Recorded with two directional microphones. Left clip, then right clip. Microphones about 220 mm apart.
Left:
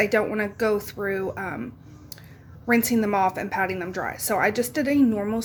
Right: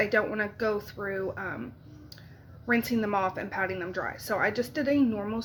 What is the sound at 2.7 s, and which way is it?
A woman's voice, 25° left (ahead or behind).